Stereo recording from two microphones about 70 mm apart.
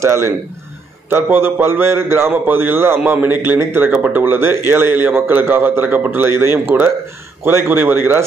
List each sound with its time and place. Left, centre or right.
0.0 s a man's voice: right